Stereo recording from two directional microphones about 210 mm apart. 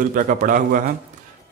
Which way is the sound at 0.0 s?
40° right (ahead or behind).